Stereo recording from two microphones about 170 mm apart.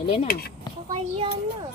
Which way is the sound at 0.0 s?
35° left (ahead or behind).